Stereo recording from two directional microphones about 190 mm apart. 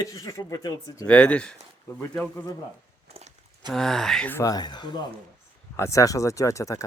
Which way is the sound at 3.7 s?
Centre (ahead or behind).